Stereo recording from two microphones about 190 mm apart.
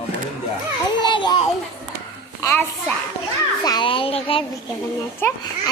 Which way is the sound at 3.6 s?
25° left (ahead or behind).